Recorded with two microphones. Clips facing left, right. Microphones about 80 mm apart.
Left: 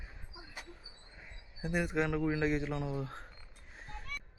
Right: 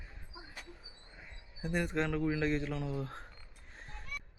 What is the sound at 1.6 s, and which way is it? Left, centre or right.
A man's voice, centre.